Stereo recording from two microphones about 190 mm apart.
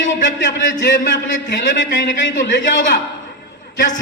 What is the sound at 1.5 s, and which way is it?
A man's voice, 70° left (ahead or behind).